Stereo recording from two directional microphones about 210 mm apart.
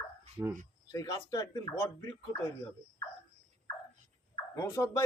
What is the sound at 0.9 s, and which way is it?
Speech, 20° left (ahead or behind).